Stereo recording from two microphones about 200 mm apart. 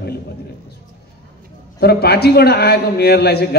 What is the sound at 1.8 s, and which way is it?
A man's voice, 50° left (ahead or behind).